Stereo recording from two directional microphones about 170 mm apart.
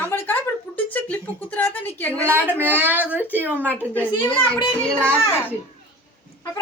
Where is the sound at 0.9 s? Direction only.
10° left (ahead or behind).